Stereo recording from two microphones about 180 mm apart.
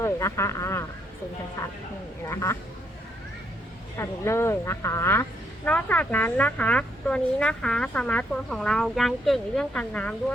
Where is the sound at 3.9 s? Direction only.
15° left (ahead or behind).